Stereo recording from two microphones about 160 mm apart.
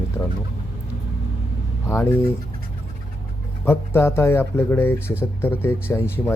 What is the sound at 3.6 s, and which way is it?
Speech, 15° left (ahead or behind).